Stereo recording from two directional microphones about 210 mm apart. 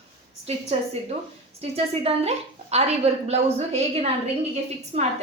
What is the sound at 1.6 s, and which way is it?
A woman's voice, 30° right (ahead or behind).